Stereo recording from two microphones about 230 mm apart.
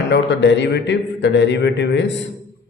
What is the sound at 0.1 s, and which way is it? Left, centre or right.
A man's voice, left.